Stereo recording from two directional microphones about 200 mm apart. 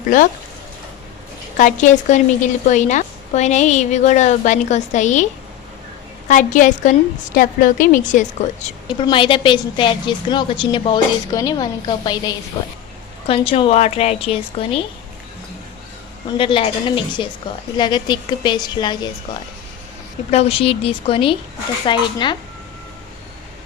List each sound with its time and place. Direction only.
1.5 s a woman's voice: 40° left (ahead or behind)
6.2 s a woman's voice: 40° left (ahead or behind)
9.0 s a woman's voice: 25° left (ahead or behind)
16.4 s a woman's voice: 25° left (ahead or behind)
20.3 s a woman's voice: 30° left (ahead or behind)